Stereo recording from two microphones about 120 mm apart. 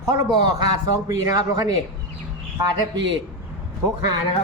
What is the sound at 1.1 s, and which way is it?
Speech, 30° right (ahead or behind).